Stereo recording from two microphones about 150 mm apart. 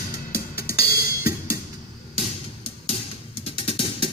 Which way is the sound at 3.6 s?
35° left (ahead or behind).